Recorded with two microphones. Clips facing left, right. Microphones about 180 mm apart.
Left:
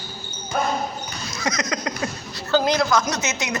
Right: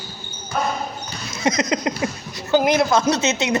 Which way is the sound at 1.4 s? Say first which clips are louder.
Right 6 dB; 25° right (ahead or behind).